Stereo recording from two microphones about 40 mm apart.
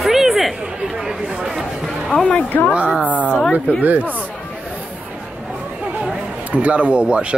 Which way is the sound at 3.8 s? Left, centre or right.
Right.